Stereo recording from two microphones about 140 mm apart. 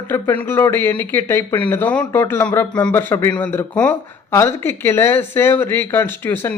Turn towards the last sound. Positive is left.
turn(degrees=15)  # may be behind; listen again after turning